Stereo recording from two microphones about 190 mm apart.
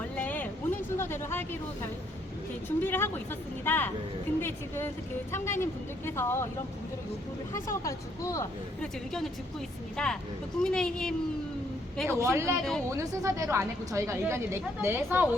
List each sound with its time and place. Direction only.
0.2 s a sound: 10° left (ahead or behind)
2.6 s speech: 10° left (ahead or behind)
7.9 s speech: 15° left (ahead or behind)
8.8 s speech: centre (ahead or behind)
12.0 s a woman's voice: 15° right (ahead or behind)